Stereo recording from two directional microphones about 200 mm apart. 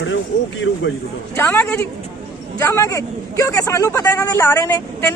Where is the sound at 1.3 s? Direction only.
10° left (ahead or behind).